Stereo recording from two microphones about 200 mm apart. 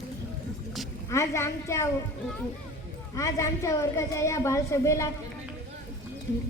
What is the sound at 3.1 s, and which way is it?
A woman's voice, 15° left (ahead or behind).